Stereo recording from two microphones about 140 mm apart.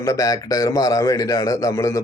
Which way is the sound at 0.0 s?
25° left (ahead or behind).